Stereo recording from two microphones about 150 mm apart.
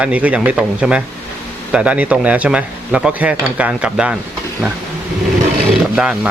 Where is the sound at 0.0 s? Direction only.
10° right (ahead or behind).